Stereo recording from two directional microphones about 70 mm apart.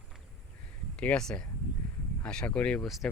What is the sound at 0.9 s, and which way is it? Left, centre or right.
Speech, centre.